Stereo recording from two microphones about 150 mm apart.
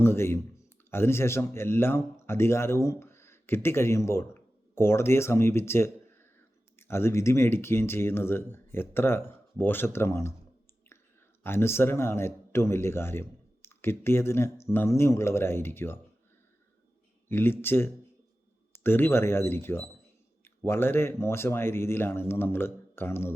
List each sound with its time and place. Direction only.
0.0 s speech: 15° left (ahead or behind)
11.4 s speech: 15° left (ahead or behind)
17.2 s speech: 15° left (ahead or behind)